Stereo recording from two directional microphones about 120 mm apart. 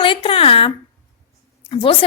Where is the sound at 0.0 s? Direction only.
45° left (ahead or behind).